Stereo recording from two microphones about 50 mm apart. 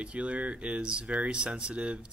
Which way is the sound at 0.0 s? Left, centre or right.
Right.